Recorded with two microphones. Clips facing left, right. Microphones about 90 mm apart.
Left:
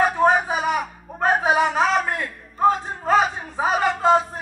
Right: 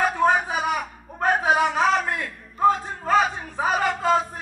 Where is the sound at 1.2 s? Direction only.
20° left (ahead or behind).